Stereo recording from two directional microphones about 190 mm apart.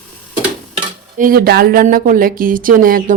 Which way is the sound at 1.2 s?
50° right (ahead or behind).